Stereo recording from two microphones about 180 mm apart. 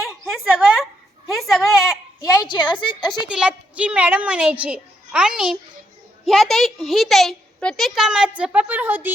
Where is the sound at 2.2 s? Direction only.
20° left (ahead or behind).